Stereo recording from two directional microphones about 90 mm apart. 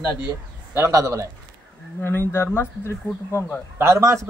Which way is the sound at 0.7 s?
35° right (ahead or behind).